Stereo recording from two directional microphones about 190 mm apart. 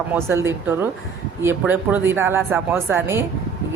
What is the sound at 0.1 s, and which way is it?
Speech, 15° right (ahead or behind).